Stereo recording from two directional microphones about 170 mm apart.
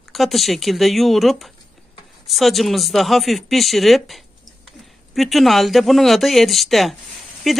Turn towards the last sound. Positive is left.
turn(degrees=0)  # may be behind; listen again after turning